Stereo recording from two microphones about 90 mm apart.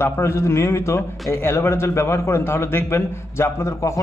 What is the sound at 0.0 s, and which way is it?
A man's voice, 30° left (ahead or behind).